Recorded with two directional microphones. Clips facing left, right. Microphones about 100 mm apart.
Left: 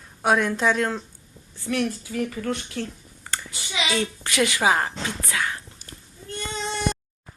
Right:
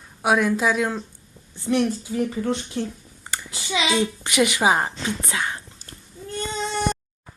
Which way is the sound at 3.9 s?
15° right (ahead or behind).